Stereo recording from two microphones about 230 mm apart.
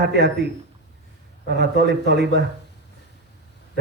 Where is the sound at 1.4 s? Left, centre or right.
Right.